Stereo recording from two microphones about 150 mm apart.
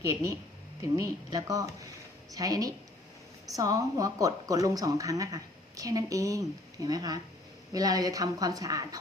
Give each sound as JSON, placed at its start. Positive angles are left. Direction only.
{"t": 0.1, "sound": "a woman's voice", "side_deg": -20}